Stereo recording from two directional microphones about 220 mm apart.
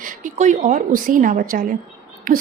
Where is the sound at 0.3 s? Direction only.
35° right (ahead or behind).